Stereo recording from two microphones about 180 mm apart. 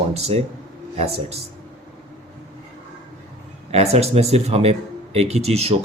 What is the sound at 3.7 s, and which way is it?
Speech, 35° right (ahead or behind).